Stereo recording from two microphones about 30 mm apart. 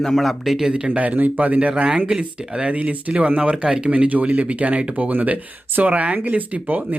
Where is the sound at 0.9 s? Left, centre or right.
Right.